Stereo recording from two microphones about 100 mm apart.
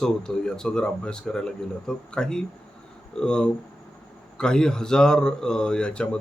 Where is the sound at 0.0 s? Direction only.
5° left (ahead or behind).